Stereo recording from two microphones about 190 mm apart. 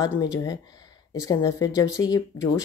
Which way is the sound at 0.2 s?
20° left (ahead or behind).